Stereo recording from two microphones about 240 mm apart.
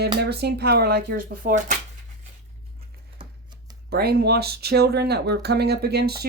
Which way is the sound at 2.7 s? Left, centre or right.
Centre.